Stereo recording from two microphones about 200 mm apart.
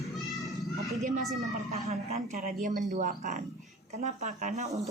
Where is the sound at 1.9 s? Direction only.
35° right (ahead or behind).